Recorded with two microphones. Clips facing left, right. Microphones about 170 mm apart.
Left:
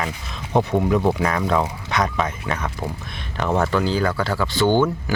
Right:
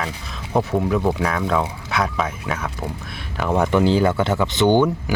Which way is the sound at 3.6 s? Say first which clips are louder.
Right 4 dB; 20° right (ahead or behind).